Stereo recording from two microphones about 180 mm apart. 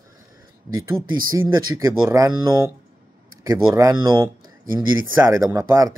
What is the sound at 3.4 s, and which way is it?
Speech, 20° right (ahead or behind).